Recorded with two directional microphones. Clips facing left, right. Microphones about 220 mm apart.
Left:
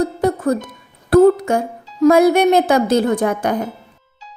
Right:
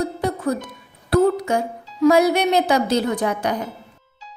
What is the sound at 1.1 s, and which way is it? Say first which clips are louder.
Speech: left 6 dB; 50° left (ahead or behind).